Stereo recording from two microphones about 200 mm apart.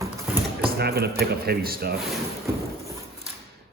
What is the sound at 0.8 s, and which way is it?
A man's voice, 50° right (ahead or behind).